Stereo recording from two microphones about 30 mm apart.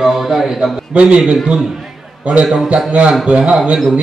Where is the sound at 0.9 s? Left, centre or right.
Right.